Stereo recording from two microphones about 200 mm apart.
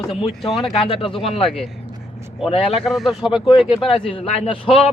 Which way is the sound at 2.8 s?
Centre (ahead or behind).